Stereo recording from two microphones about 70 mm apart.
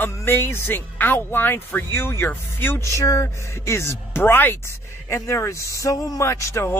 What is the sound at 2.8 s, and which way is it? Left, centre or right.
Speech, left.